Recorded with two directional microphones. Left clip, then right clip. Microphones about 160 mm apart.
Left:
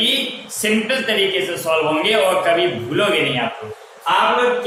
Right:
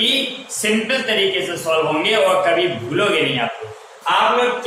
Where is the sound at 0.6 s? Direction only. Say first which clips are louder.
Even; 15° left (ahead or behind).